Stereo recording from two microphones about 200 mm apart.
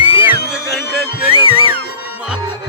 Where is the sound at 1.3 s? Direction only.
25° left (ahead or behind).